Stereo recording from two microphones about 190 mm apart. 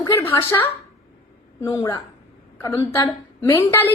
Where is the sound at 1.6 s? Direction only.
15° left (ahead or behind).